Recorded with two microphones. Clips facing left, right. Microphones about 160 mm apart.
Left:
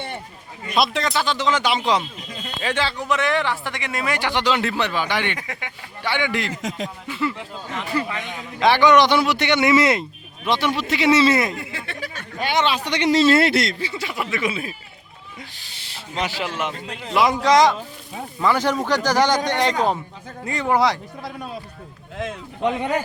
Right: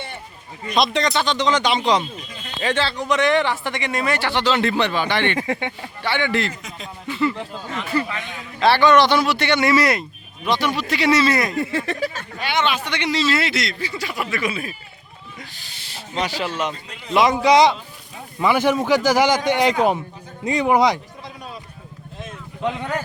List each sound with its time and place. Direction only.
0.7 s speech: 5° left (ahead or behind)
5.4 s speech: 30° right (ahead or behind)
6.0 s speech: 10° left (ahead or behind)
6.5 s a man's voice: 90° left
7.1 s speech: 5° left (ahead or behind); by 11.5 s 25° left (ahead or behind)
11.6 s speech: 40° right (ahead or behind)
12.4 s a man's voice: 40° left (ahead or behind)
13.7 s speech: 25° left (ahead or behind)
16.4 s speech: 5° left (ahead or behind)
17.4 s speech: 10° right (ahead or behind)
22.8 s speech: 15° left (ahead or behind)